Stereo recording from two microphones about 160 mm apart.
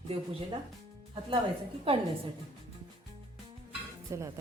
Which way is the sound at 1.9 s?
35° right (ahead or behind).